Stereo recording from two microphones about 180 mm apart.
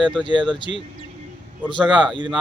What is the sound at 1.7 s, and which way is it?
Speech, 25° right (ahead or behind).